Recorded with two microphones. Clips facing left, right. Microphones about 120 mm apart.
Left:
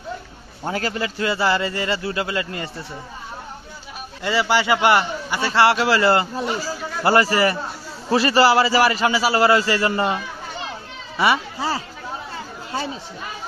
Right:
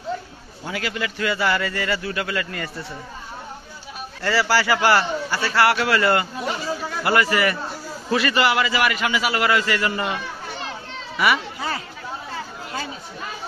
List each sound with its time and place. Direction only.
0.7 s a man's voice: 40° left (ahead or behind)
4.2 s a man's voice: 20° left (ahead or behind)